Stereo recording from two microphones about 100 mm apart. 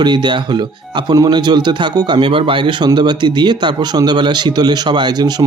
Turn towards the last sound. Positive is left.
turn(degrees=-45)  # may be behind; listen again after turning